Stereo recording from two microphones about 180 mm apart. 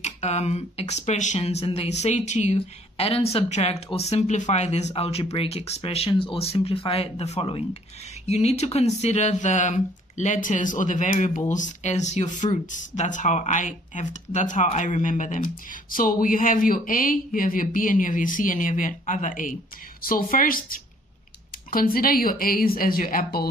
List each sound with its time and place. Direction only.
0.0 s speech: 40° left (ahead or behind)